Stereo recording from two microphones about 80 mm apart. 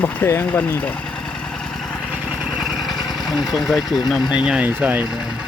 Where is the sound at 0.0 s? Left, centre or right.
Left.